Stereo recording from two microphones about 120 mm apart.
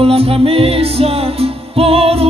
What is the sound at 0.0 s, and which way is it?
Music, 55° right (ahead or behind).